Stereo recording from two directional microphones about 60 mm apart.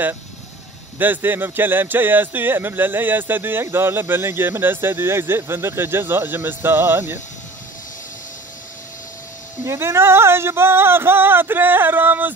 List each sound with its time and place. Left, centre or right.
0.9 s speech: right
9.7 s speech: right